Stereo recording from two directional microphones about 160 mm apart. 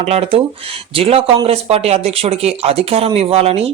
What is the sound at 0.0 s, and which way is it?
Speech, 40° right (ahead or behind).